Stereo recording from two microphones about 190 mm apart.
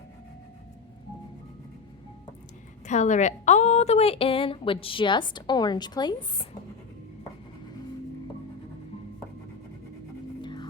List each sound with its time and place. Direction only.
2.8 s a woman's voice: 40° left (ahead or behind); by 6.5 s 25° left (ahead or behind)
10.4 s music: 25° left (ahead or behind)